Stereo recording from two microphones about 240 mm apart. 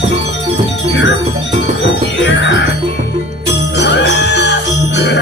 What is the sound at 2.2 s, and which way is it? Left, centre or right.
Music, left.